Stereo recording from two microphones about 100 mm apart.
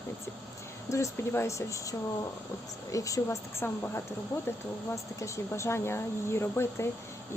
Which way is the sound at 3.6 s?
20° left (ahead or behind).